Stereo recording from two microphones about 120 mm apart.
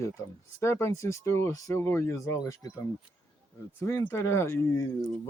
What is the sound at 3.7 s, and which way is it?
Speech, 20° left (ahead or behind).